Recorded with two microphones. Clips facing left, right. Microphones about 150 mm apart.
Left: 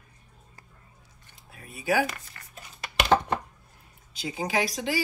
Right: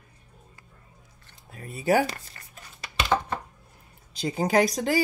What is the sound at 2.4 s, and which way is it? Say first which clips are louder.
Tearing: even; 30° right (ahead or behind).